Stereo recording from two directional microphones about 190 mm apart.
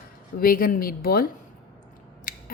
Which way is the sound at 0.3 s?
50° left (ahead or behind).